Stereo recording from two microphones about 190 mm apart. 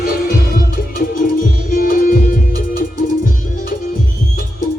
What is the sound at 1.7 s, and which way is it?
Music, 50° left (ahead or behind).